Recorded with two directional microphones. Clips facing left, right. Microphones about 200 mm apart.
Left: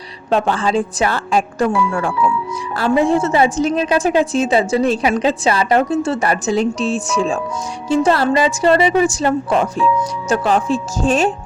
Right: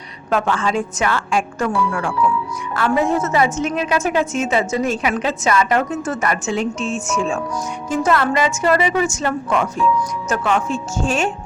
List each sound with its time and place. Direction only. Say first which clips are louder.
0.3 s a woman's voice: left 3 dB; 30° left (ahead or behind)